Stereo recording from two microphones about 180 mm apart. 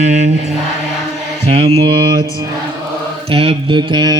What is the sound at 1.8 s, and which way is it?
Mantra, 25° right (ahead or behind).